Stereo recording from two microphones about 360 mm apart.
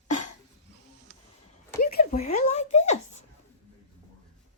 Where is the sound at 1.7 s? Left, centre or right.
Left.